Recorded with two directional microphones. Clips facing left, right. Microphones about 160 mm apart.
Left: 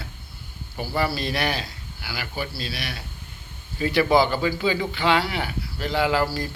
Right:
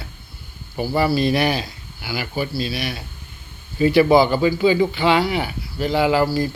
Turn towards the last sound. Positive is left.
turn(degrees=-10)  # may be behind; listen again after turning